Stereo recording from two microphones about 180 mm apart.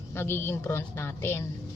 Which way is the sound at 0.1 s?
15° left (ahead or behind).